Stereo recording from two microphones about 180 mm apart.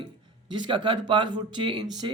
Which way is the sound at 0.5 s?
25° right (ahead or behind).